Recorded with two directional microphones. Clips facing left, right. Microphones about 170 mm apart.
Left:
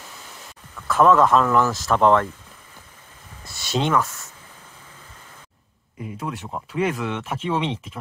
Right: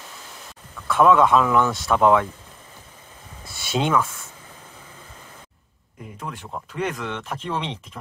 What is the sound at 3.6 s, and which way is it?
Speech, 5° right (ahead or behind).